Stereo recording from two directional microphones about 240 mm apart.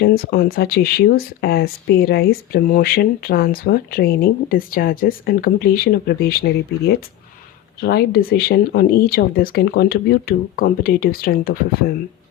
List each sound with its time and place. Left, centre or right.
0.0 s speech: left